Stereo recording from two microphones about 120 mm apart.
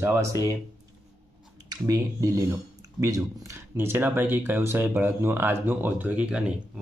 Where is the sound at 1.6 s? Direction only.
30° right (ahead or behind).